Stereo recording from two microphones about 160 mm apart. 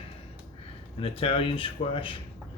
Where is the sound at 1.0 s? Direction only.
35° left (ahead or behind).